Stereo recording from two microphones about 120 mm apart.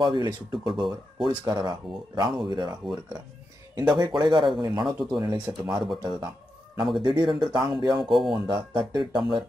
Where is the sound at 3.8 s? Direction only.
35° right (ahead or behind).